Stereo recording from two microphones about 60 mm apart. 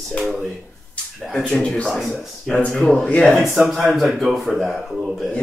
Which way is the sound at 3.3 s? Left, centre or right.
Centre.